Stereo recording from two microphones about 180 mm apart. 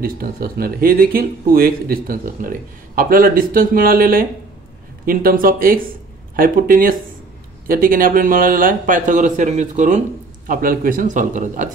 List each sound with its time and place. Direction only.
0.0 s a man's voice: 55° right (ahead or behind)